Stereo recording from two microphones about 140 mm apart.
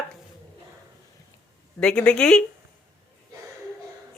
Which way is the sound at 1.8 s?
5° left (ahead or behind).